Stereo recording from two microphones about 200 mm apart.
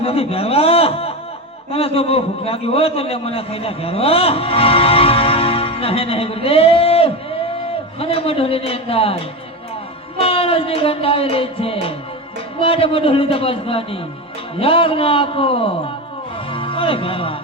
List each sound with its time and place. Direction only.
0.0 s a man's voice: 30° left (ahead or behind)
10.2 s a man's voice: 30° left (ahead or behind)